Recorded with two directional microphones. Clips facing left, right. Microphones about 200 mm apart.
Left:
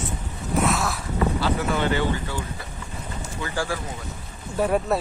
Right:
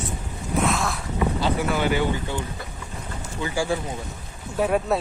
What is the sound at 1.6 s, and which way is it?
Speech, 10° right (ahead or behind).